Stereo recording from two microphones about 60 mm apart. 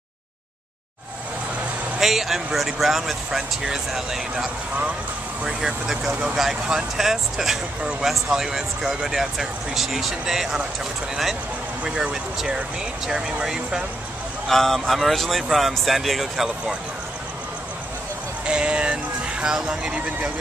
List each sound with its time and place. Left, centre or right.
2.0 s speech: centre
6.3 s speech: centre
11.8 s speech: centre
14.5 s speech: centre
18.4 s music: centre
19.4 s speech: centre